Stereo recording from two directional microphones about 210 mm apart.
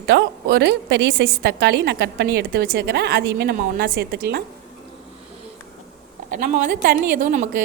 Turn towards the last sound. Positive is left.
turn(degrees=-35)  # may be behind; listen again after turning